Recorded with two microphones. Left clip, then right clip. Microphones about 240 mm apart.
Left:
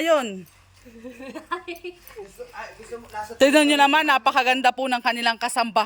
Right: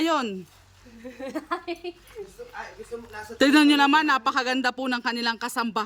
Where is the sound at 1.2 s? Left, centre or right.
Centre.